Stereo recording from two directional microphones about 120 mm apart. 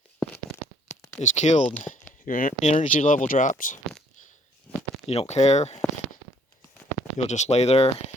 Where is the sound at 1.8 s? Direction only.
90° left.